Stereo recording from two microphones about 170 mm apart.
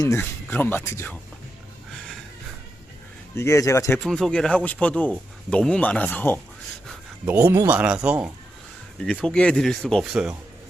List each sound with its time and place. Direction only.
0.0 s speech: 15° left (ahead or behind)
3.3 s speech: 15° left (ahead or behind)
4.0 s speech: 5° left (ahead or behind)
7.3 s speech: 15° right (ahead or behind)
9.0 s speech: 5° left (ahead or behind)